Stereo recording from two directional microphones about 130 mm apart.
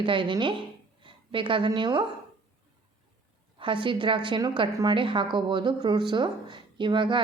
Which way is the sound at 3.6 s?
40° right (ahead or behind).